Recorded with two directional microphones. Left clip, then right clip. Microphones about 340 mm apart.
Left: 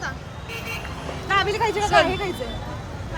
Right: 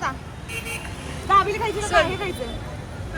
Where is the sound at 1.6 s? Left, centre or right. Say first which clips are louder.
Left 2 dB; centre.